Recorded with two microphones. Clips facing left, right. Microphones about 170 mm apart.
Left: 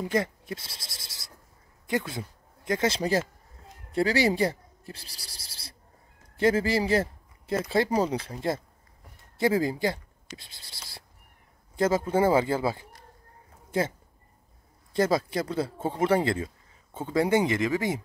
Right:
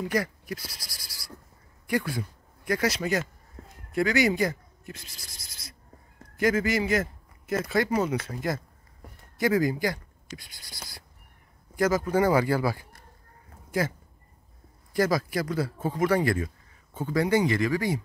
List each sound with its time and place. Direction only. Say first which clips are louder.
0.1 s speech: left 1 dB; 25° left (ahead or behind)